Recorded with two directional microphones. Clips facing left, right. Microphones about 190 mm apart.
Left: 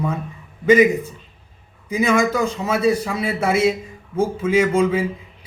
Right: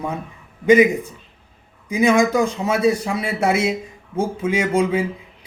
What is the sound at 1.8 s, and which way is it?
A man's voice, 15° right (ahead or behind).